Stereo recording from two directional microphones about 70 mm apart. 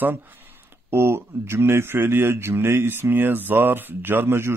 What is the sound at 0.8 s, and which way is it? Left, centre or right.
A man's voice, right.